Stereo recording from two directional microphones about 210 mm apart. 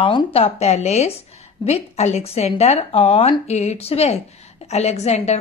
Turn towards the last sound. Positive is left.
turn(degrees=30)  # may be behind; listen again after turning